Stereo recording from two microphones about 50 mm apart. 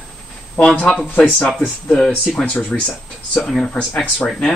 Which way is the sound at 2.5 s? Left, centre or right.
Left.